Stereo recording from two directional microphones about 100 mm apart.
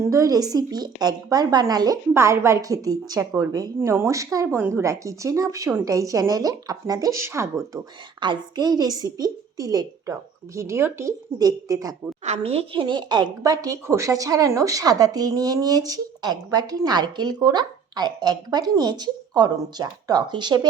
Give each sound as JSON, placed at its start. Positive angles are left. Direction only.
{"t": 0.0, "sound": "speech", "side_deg": -35}
{"t": 2.1, "sound": "speech", "side_deg": -25}
{"t": 3.8, "sound": "speech", "side_deg": -25}
{"t": 8.2, "sound": "speech", "side_deg": -50}
{"t": 12.3, "sound": "a woman's voice", "side_deg": -85}
{"t": 13.4, "sound": "speech", "side_deg": -35}